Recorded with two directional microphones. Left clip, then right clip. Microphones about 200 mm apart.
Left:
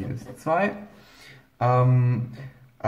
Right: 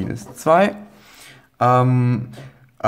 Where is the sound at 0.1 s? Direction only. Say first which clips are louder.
Right 9 dB; 35° right (ahead or behind).